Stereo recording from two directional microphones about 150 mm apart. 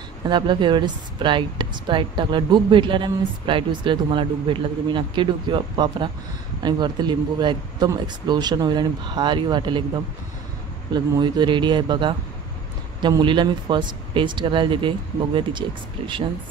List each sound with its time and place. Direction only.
0.2 s speech: 30° right (ahead or behind)
10.9 s speech: 30° right (ahead or behind)